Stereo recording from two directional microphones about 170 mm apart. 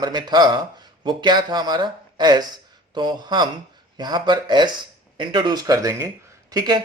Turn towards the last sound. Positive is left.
turn(degrees=-25)  # may be behind; listen again after turning